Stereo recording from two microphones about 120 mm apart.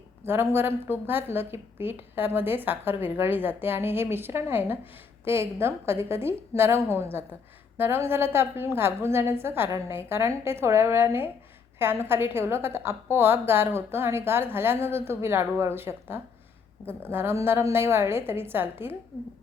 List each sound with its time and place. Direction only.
0.3 s a woman's voice: 20° right (ahead or behind)